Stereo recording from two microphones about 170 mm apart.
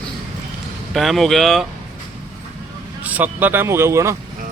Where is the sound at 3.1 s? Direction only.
10° right (ahead or behind).